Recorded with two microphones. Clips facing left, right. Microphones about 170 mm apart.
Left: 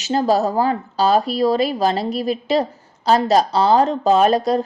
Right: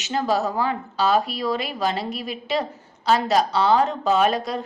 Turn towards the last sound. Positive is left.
turn(degrees=35)  # may be behind; listen again after turning